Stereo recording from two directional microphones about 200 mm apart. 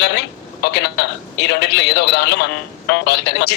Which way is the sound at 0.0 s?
55° left (ahead or behind).